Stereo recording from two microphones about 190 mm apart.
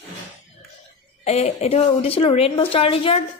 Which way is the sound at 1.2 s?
35° left (ahead or behind).